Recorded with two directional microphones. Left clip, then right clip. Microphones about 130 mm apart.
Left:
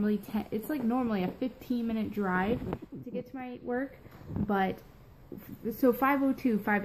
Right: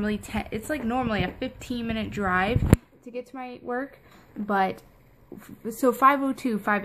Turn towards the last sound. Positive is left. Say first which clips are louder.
# right 4 dB
turn(degrees=-40)  # may be behind; listen again after turning